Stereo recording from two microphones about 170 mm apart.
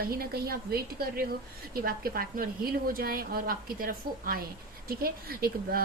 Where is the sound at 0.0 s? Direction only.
65° right (ahead or behind).